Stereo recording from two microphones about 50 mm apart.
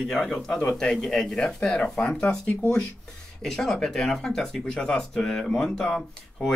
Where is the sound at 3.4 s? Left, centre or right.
Centre.